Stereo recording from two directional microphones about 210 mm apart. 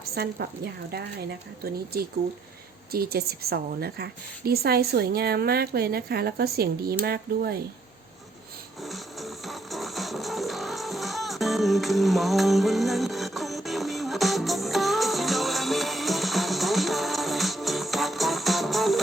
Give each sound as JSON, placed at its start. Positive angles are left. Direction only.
{"t": 0.1, "sound": "a woman's voice", "side_deg": -50}
{"t": 8.8, "sound": "music", "side_deg": 0}